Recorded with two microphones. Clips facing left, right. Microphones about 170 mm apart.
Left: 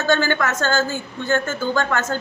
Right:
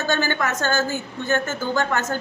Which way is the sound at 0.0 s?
15° right (ahead or behind).